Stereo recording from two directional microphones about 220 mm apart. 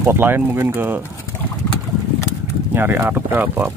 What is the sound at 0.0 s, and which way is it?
Speech, 10° right (ahead or behind).